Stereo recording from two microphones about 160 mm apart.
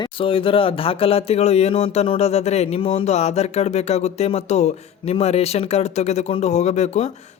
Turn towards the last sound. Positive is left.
turn(degrees=45)  # may be behind; listen again after turning